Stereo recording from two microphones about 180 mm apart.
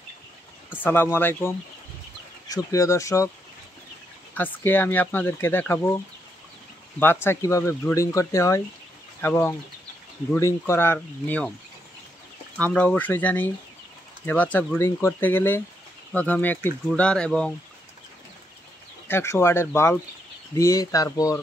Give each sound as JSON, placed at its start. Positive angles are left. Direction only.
{"t": 0.8, "sound": "speech", "side_deg": 15}
{"t": 4.4, "sound": "speech", "side_deg": 10}
{"t": 12.5, "sound": "speech", "side_deg": 5}
{"t": 19.0, "sound": "speech", "side_deg": 15}